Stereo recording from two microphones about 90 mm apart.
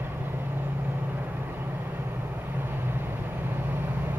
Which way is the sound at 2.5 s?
25° right (ahead or behind).